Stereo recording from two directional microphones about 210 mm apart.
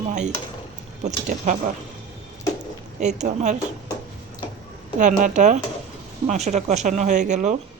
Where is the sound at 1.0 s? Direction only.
35° right (ahead or behind).